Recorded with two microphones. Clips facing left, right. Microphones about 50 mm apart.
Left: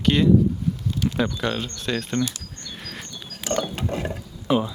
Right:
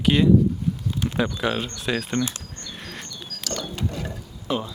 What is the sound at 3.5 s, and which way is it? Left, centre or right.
Ratchet, left.